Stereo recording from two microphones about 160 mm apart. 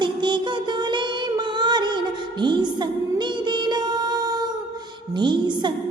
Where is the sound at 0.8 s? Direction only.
30° right (ahead or behind).